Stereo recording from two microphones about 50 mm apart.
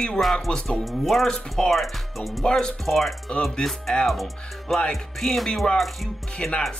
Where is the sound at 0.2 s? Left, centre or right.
Centre.